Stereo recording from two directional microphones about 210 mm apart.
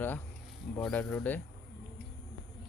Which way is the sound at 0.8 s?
5° left (ahead or behind).